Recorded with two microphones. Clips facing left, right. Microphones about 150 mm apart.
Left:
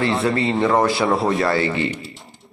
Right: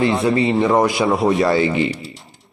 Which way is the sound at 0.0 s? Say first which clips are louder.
Right 3 dB; 20° right (ahead or behind).